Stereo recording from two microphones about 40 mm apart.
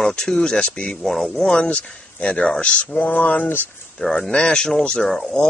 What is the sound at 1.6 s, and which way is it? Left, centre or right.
Speech, left.